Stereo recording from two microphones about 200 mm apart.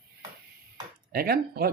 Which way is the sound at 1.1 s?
50° right (ahead or behind).